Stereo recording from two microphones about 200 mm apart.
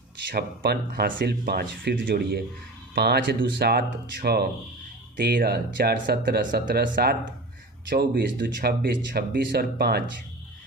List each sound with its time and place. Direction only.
0.3 s speech: 50° right (ahead or behind)